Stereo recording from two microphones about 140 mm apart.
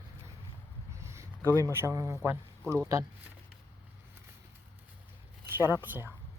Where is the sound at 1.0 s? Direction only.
20° right (ahead or behind).